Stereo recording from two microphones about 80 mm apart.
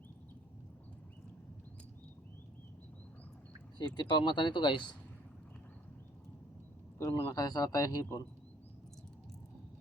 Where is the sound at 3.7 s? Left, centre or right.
Left.